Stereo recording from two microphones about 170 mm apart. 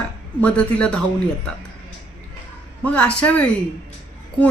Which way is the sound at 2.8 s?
5° left (ahead or behind).